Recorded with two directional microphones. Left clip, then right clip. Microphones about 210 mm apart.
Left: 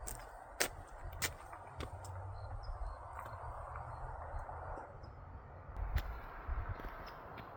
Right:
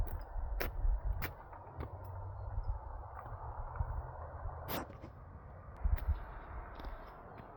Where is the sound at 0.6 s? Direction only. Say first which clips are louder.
Left 5 dB; 5° left (ahead or behind).